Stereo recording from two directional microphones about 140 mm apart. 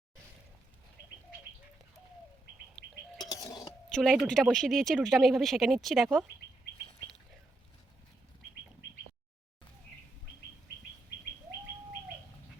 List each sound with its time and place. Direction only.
2.8 s bird: 5° left (ahead or behind)
3.2 s a sound: 30° left (ahead or behind)
3.9 s speech: centre (ahead or behind)